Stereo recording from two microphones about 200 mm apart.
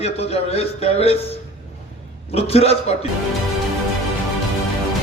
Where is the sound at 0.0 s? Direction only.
30° left (ahead or behind).